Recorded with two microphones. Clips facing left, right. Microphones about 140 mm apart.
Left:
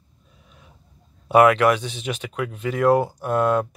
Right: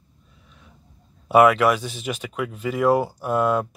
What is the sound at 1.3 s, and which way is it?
Speech, 5° right (ahead or behind).